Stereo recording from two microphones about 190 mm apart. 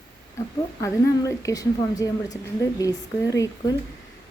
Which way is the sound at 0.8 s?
15° left (ahead or behind).